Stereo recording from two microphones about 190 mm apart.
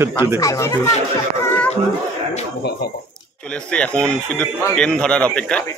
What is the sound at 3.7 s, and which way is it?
Speech, 5° left (ahead or behind).